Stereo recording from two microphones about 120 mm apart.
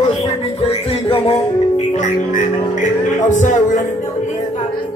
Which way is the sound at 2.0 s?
90° left.